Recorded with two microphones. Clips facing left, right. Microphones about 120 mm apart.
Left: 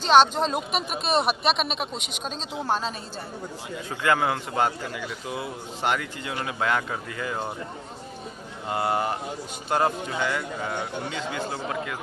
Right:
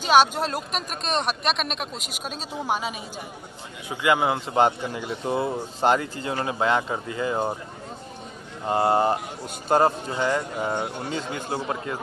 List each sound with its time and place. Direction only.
0.0 s speech: 10° right (ahead or behind)
2.5 s a woman's voice: 15° right (ahead or behind)
3.9 s speech: 15° right (ahead or behind)
8.6 s speech: 30° right (ahead or behind)